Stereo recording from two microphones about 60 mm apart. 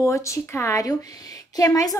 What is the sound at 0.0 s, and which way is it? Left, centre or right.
Speech, left.